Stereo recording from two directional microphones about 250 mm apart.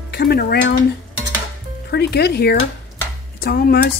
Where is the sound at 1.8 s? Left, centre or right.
Left.